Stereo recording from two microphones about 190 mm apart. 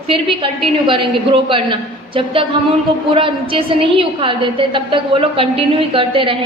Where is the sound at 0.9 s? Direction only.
25° right (ahead or behind).